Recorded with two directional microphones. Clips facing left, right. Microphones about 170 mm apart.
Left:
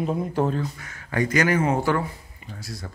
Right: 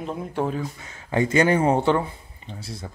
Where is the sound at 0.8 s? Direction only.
25° right (ahead or behind).